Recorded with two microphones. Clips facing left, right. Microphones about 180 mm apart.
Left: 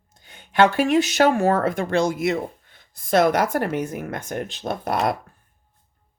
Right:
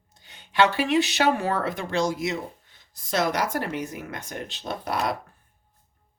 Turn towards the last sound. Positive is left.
turn(degrees=50)  # may be behind; listen again after turning